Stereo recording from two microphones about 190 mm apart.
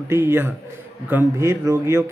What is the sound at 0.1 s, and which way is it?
A man's voice, 15° right (ahead or behind).